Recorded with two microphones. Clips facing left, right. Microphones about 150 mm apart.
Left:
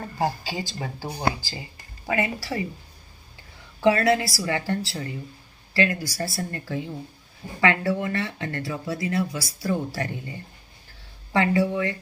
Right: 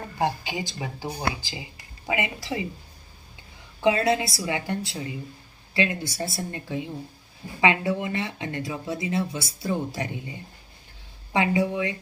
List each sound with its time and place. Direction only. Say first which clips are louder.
0.2 s speech: even; 20° right (ahead or behind)
3.8 s speech: left 2 dB; 20° right (ahead or behind)